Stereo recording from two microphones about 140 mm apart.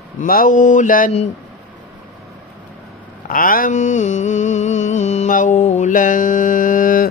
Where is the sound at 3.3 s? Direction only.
90° left.